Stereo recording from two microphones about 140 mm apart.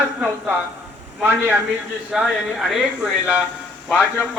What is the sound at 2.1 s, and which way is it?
Speech, centre (ahead or behind).